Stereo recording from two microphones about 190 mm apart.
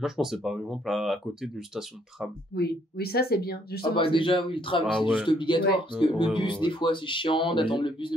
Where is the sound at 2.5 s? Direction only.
55° left (ahead or behind).